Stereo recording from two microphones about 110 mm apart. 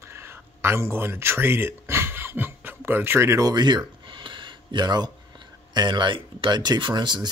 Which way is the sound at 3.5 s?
40° right (ahead or behind).